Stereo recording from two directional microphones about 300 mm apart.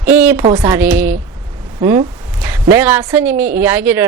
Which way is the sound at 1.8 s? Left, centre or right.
Centre.